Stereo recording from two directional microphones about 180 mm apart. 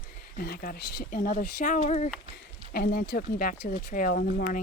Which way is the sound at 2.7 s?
60° left (ahead or behind).